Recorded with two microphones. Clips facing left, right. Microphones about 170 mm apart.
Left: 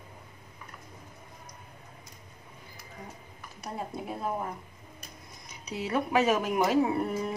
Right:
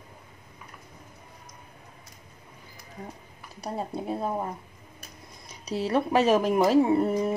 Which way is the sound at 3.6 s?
30° right (ahead or behind).